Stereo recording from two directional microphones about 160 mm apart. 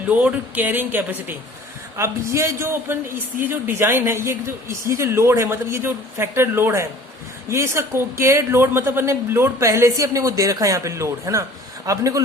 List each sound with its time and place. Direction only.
0.1 s a man's voice: 10° right (ahead or behind)